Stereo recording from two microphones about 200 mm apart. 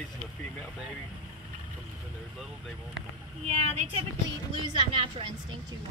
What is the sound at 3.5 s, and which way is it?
A woman's voice, 35° right (ahead or behind).